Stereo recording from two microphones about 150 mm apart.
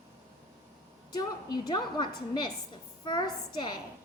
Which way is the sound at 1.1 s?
25° left (ahead or behind).